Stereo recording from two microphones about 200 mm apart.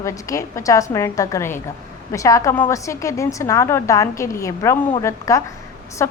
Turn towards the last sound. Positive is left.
turn(degrees=10)  # may be behind; listen again after turning